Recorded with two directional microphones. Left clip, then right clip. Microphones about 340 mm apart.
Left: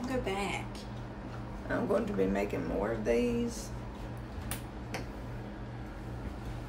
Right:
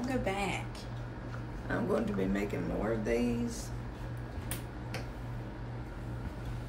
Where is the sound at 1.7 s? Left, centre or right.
Centre.